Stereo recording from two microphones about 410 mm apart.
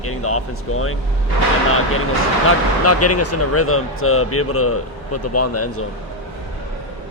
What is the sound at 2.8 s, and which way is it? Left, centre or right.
Speech, left.